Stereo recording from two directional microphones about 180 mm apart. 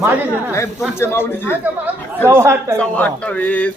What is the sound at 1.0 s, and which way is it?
Speech, 15° left (ahead or behind).